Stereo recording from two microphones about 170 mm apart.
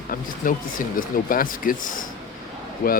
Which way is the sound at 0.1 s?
55° left (ahead or behind).